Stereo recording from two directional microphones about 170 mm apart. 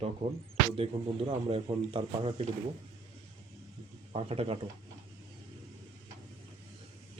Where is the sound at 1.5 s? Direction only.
35° right (ahead or behind).